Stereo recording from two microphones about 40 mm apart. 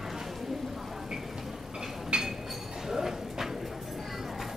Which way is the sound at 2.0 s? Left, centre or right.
Centre.